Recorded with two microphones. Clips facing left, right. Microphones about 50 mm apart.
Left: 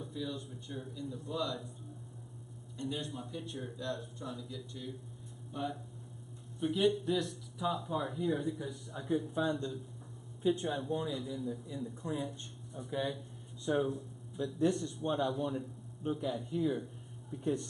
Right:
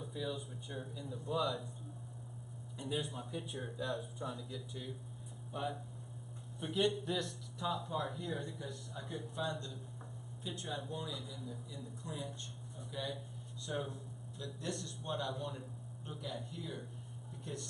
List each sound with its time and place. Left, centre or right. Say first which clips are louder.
0.1 s speech: right 1 dB; centre
2.8 s speech: left 1 dB; centre
10.4 s speech: left 11 dB; left